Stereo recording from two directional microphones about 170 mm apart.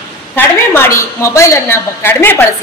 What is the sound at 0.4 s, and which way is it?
A woman's voice, 15° left (ahead or behind).